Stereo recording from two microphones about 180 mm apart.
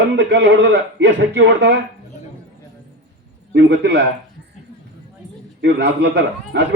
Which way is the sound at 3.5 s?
75° right (ahead or behind).